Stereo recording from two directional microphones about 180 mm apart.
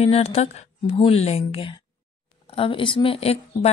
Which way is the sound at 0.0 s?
35° left (ahead or behind).